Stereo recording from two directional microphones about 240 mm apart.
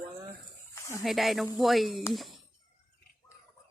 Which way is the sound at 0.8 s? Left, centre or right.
Centre.